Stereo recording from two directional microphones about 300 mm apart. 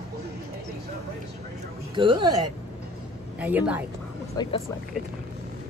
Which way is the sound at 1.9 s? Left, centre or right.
Centre.